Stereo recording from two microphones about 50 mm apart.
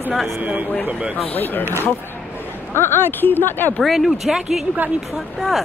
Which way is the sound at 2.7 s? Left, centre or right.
Left.